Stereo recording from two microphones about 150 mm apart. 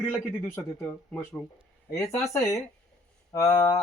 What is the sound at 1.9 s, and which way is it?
Speech, 20° left (ahead or behind).